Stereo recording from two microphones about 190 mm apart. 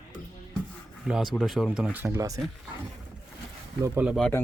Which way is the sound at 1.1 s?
Centre (ahead or behind).